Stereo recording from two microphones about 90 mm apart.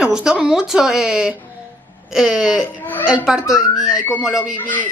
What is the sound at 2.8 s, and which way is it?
Speech, 20° left (ahead or behind).